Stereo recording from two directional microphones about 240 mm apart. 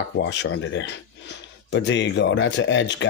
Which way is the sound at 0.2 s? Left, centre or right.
Left.